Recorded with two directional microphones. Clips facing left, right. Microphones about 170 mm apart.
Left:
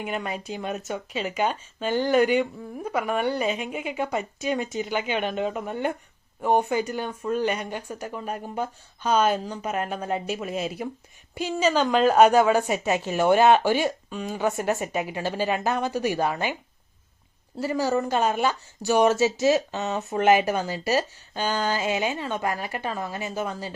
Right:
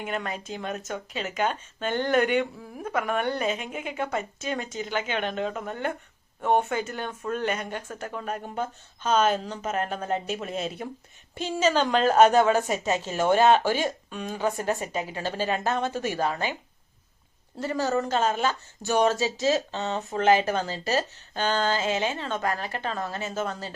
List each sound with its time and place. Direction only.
0.0 s speech: 5° left (ahead or behind)
14.4 s speech: 20° left (ahead or behind)
17.6 s speech: 10° left (ahead or behind)